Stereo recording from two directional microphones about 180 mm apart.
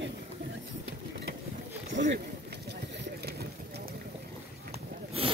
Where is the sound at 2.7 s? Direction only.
65° right (ahead or behind).